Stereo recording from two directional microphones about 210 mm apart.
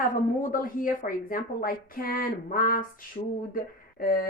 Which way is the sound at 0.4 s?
40° left (ahead or behind).